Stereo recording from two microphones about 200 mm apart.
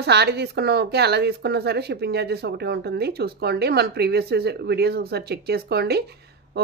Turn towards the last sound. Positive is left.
turn(degrees=-55)  # may be behind; listen again after turning